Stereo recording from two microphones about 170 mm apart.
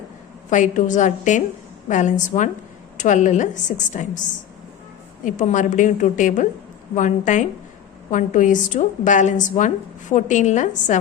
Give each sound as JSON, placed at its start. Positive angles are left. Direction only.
{"t": 0.5, "sound": "a woman's voice", "side_deg": 45}
{"t": 5.2, "sound": "a woman's voice", "side_deg": 50}